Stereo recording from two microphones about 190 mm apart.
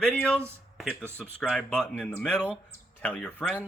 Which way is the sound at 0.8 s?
5° right (ahead or behind).